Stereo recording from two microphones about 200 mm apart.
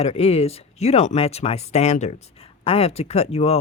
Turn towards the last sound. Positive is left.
turn(degrees=30)  # may be behind; listen again after turning